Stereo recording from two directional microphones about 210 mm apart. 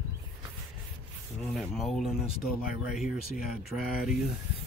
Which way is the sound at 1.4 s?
Centre (ahead or behind).